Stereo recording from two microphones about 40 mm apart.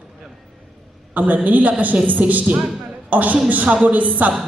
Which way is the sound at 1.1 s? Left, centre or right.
Right.